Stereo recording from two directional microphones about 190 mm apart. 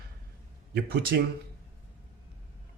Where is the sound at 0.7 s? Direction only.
55° right (ahead or behind).